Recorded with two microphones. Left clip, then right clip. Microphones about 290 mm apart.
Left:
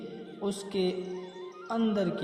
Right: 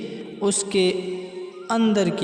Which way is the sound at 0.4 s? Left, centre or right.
Right.